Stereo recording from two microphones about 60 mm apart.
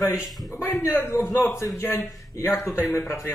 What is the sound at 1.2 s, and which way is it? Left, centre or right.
Speech, left.